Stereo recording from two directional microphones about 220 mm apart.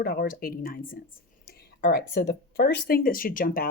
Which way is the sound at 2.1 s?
45° left (ahead or behind).